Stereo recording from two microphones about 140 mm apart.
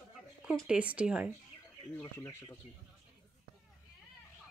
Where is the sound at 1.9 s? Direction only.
15° left (ahead or behind).